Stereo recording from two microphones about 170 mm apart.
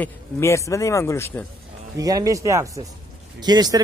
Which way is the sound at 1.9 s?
20° right (ahead or behind).